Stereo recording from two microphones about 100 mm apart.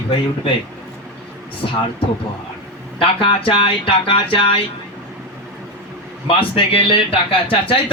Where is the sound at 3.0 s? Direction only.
65° left (ahead or behind).